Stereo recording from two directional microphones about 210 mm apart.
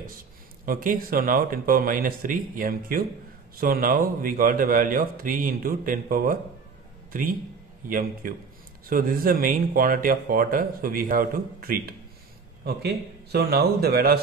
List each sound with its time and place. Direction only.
0.7 s a man's voice: 40° right (ahead or behind)